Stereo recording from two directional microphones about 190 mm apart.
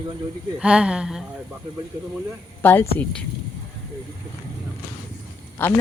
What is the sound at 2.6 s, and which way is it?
Speech, 10° left (ahead or behind).